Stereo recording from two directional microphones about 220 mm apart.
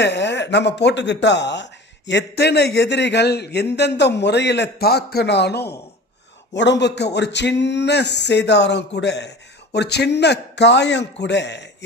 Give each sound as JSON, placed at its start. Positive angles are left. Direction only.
{"t": 0.0, "sound": "speech", "side_deg": 50}